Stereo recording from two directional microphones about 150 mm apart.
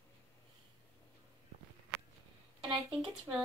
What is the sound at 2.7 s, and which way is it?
Speech, 35° right (ahead or behind).